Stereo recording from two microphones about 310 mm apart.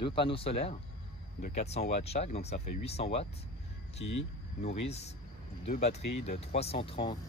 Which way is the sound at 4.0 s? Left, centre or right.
Left.